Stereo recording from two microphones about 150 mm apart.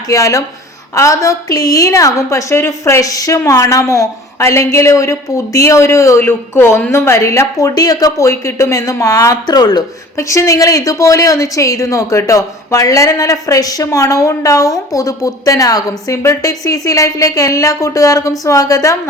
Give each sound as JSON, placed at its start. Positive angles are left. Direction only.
{"t": 0.1, "sound": "a woman's voice", "side_deg": 20}